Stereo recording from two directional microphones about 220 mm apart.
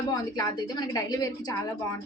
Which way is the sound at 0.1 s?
15° left (ahead or behind).